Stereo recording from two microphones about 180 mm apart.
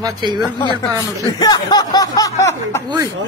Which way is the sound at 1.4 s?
20° left (ahead or behind).